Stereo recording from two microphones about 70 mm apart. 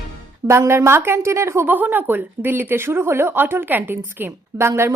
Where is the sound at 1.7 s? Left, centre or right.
Right.